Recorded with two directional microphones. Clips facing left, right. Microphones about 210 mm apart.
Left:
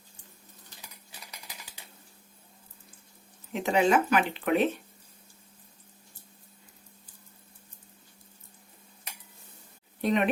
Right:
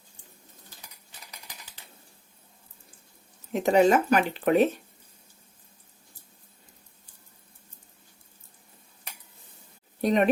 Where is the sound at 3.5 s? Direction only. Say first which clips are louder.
Right 4 dB; 40° right (ahead or behind).